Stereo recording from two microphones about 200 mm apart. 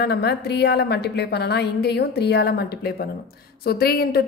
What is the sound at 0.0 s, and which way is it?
A woman's voice, 55° left (ahead or behind).